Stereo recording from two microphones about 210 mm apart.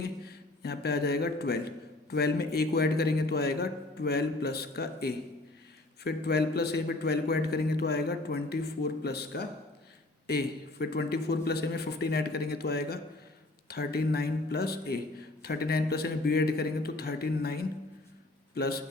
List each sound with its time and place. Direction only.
0.3 s a man's voice: 50° left (ahead or behind)